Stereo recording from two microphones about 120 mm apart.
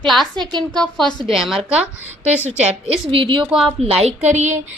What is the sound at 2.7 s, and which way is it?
Speech, 45° right (ahead or behind).